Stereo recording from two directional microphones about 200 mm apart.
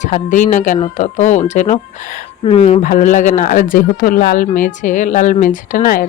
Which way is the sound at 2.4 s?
30° left (ahead or behind).